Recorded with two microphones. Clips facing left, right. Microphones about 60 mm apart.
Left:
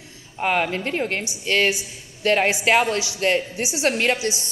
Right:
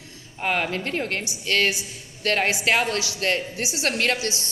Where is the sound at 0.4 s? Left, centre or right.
Centre.